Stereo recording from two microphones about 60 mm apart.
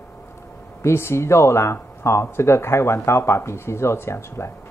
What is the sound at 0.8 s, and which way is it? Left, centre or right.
Speech, left.